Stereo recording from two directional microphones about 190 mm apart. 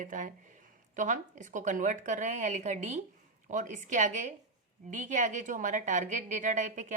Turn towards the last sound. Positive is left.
turn(degrees=-40)  # may be behind; listen again after turning